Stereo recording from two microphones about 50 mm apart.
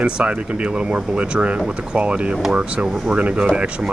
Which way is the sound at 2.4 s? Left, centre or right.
Centre.